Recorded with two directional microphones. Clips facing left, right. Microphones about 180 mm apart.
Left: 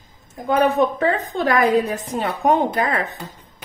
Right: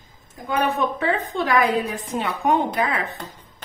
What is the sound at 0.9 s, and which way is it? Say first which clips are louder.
Speech: left 2 dB; 40° left (ahead or behind).